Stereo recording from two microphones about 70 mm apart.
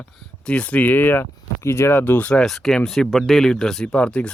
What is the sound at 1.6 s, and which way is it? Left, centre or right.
Speech, left.